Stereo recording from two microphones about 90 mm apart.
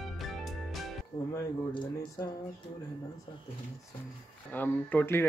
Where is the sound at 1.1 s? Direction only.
55° left (ahead or behind).